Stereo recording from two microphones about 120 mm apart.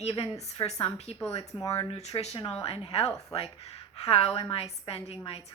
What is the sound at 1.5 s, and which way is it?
Speech, 25° left (ahead or behind).